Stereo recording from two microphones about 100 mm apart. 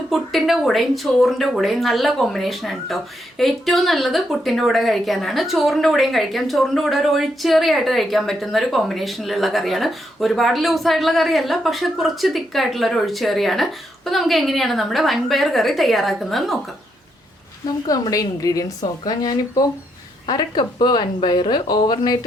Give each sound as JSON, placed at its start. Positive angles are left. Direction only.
{"t": 0.1, "sound": "speech", "side_deg": 0}
{"t": 17.8, "sound": "a woman's voice", "side_deg": 40}